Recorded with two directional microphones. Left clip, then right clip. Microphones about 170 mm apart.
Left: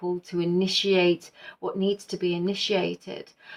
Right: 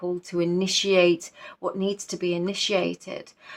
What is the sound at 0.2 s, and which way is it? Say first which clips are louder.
Speech: right 1 dB; 45° right (ahead or behind).